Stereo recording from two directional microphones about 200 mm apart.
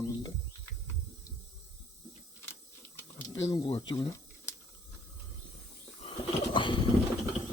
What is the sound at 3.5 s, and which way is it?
Speech, 20° left (ahead or behind).